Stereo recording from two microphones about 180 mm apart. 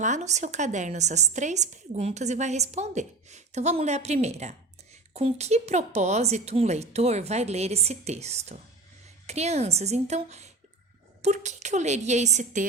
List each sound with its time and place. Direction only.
0.0 s a woman's voice: 40° right (ahead or behind)